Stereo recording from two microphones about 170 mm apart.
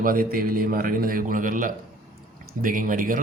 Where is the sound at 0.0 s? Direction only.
55° right (ahead or behind).